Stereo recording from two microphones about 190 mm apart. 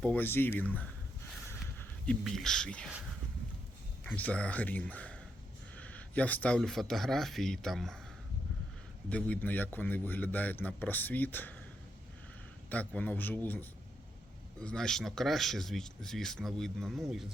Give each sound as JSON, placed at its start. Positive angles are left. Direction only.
{"t": 0.0, "sound": "speech", "side_deg": 10}
{"t": 2.0, "sound": "speech", "side_deg": 5}
{"t": 4.0, "sound": "speech", "side_deg": 5}
{"t": 9.0, "sound": "speech", "side_deg": 5}
{"t": 12.7, "sound": "speech", "side_deg": 10}